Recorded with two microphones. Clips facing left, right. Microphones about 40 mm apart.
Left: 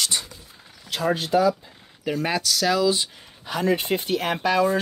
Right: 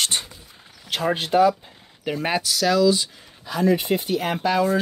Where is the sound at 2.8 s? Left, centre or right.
Left.